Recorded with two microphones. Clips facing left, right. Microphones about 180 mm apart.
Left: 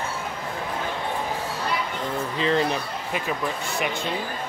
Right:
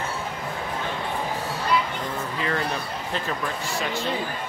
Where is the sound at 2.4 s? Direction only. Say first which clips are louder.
Left 5 dB; 20° left (ahead or behind).